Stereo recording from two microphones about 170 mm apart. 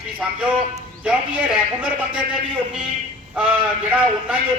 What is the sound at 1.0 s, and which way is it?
Speech, 5° right (ahead or behind).